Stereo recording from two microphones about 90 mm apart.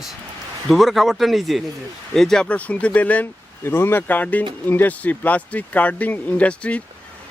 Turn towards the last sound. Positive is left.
turn(degrees=15)  # may be behind; listen again after turning